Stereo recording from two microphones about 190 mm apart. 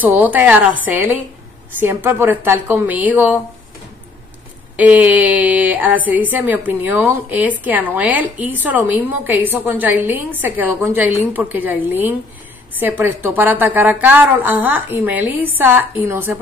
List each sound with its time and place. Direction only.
0.0 s a woman's voice: 10° right (ahead or behind)
4.7 s a woman's voice: 10° right (ahead or behind)